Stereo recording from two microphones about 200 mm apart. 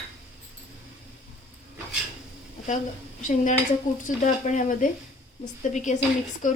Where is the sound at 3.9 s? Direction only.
40° left (ahead or behind).